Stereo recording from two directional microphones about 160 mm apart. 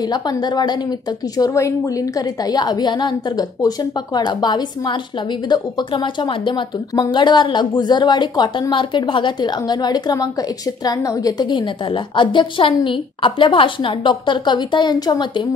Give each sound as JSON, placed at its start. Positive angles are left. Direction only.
{"t": 0.0, "sound": "speech", "side_deg": 25}